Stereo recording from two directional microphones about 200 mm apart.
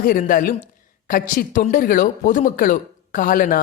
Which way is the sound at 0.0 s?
45° left (ahead or behind).